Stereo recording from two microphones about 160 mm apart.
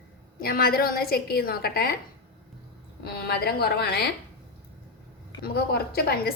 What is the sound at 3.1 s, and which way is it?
A woman's voice, 85° left.